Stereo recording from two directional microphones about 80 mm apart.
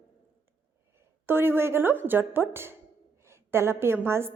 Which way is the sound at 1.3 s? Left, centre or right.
Right.